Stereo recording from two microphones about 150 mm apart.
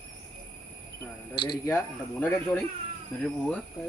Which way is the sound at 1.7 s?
10° left (ahead or behind).